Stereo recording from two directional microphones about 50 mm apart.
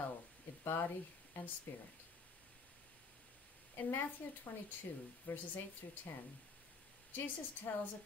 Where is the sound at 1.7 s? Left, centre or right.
Left.